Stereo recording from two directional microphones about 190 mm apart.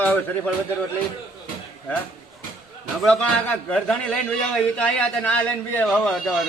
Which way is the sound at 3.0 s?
5° left (ahead or behind).